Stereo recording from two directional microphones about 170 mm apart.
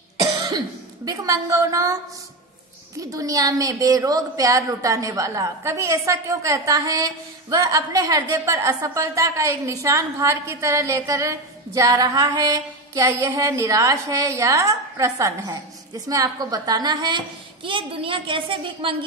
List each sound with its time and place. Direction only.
0.2 s speech: 20° right (ahead or behind)
3.0 s a woman's voice: 20° right (ahead or behind)